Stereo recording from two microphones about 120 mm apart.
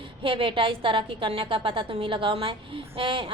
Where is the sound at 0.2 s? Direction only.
45° right (ahead or behind).